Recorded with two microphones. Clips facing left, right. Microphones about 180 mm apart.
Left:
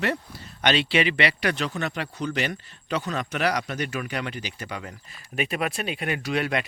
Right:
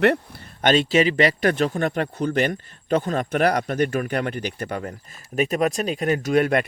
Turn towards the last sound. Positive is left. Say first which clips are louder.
# right 7 dB
turn(degrees=-50)  # may be behind; listen again after turning